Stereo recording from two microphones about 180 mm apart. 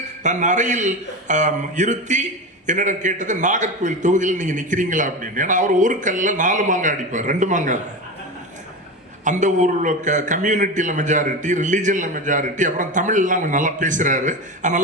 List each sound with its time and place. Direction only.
0.2 s a man's voice: 40° right (ahead or behind)
9.2 s a man's voice: 40° right (ahead or behind)